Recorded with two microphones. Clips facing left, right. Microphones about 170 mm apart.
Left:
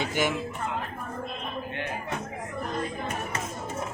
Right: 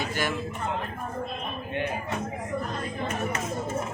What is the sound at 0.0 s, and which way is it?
Speech, 15° left (ahead or behind).